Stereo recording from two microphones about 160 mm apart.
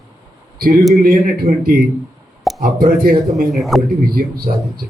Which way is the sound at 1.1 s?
65° right (ahead or behind).